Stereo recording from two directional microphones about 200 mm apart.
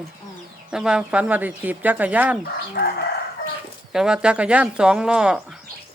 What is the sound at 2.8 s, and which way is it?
Crowing, 50° left (ahead or behind).